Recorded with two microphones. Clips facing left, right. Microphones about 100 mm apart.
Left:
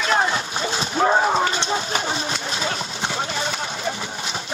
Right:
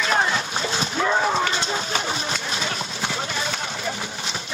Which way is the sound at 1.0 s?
40° left (ahead or behind).